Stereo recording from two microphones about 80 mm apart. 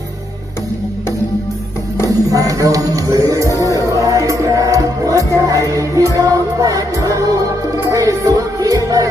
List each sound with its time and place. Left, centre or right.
2.0 s music: right